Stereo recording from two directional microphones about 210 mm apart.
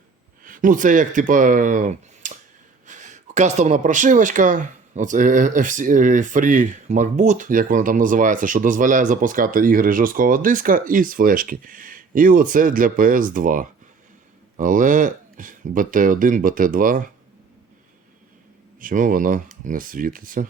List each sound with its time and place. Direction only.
0.4 s speech: 40° right (ahead or behind)
18.8 s speech: 40° right (ahead or behind)